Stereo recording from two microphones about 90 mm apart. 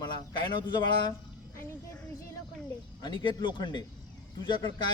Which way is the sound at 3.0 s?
60° left (ahead or behind).